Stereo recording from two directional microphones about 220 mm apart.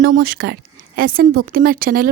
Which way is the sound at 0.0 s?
45° right (ahead or behind).